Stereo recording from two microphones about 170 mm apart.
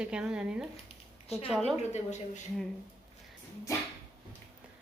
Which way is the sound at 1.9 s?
45° left (ahead or behind).